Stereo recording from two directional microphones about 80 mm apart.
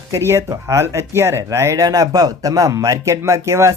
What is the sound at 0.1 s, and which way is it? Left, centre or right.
Speech, right.